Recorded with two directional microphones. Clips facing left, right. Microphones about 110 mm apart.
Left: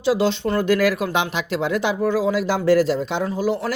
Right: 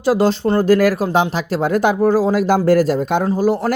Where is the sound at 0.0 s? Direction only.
45° right (ahead or behind).